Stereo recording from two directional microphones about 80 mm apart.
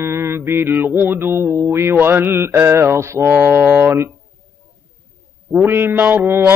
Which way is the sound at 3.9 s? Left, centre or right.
Right.